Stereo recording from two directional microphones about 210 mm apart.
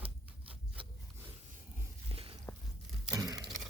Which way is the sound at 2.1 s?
25° right (ahead or behind).